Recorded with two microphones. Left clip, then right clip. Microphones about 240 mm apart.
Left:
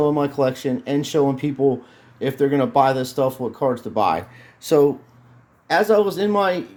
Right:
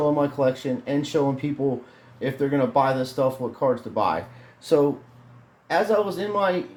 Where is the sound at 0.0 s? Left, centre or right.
Left.